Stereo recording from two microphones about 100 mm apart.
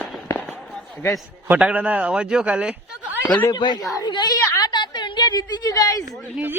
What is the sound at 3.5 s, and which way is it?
Speech, 45° left (ahead or behind).